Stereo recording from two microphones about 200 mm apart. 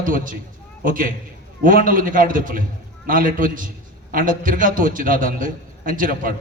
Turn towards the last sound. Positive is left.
turn(degrees=-45)  # may be behind; listen again after turning